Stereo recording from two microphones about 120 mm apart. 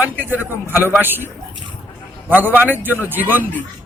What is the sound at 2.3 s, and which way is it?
Speech, 15° right (ahead or behind).